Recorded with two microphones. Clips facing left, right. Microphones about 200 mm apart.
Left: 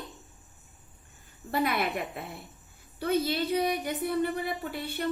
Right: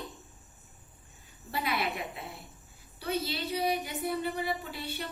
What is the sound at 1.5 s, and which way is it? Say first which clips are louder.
A woman's voice: left 5 dB; 50° left (ahead or behind).